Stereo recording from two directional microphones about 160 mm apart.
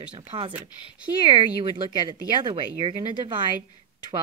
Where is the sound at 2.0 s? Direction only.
30° right (ahead or behind).